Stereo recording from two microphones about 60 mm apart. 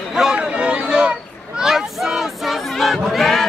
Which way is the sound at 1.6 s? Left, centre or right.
Centre.